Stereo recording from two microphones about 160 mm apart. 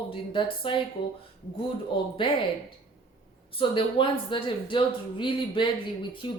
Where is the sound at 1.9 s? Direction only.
30° left (ahead or behind).